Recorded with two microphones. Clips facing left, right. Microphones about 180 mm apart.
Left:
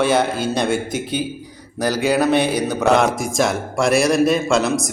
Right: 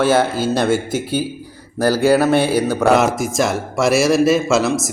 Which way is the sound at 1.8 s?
15° left (ahead or behind).